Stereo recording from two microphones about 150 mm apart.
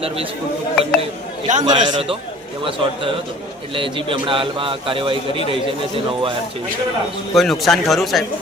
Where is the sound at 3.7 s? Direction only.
35° right (ahead or behind).